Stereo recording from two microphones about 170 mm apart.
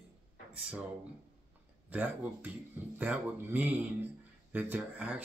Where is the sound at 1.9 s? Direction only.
10° right (ahead or behind).